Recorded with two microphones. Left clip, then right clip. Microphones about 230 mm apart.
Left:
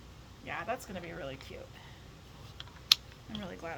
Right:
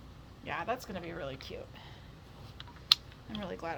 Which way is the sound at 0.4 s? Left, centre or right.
Right.